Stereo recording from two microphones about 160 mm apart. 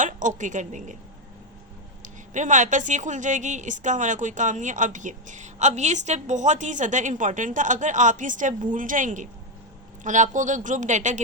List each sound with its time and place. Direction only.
0.0 s a woman's voice: 50° right (ahead or behind)
2.0 s a woman's voice: 50° right (ahead or behind)